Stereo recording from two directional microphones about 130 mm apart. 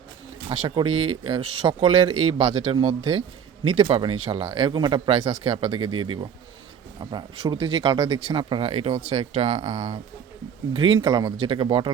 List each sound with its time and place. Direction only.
0.4 s speech: 55° right (ahead or behind)
10.8 s speech: 40° right (ahead or behind)